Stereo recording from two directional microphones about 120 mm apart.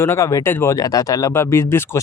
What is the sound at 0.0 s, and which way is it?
Speech, 25° left (ahead or behind).